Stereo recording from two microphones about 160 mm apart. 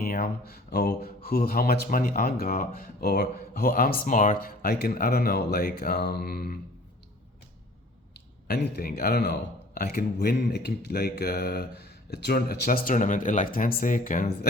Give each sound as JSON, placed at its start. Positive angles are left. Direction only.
{"t": 0.0, "sound": "speech", "side_deg": 65}
{"t": 8.1, "sound": "speech", "side_deg": 90}
{"t": 12.1, "sound": "speech", "side_deg": 85}